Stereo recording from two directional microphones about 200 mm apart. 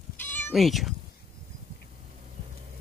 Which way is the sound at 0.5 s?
Centre (ahead or behind).